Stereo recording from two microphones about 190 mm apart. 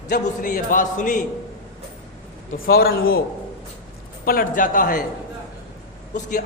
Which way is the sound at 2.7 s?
50° left (ahead or behind).